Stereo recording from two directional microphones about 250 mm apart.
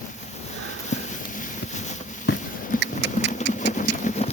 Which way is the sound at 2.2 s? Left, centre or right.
Left.